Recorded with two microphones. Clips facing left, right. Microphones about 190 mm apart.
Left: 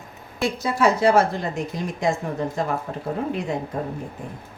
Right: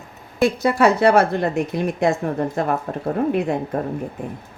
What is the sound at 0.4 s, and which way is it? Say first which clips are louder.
A woman's voice: right 4 dB; 60° right (ahead or behind).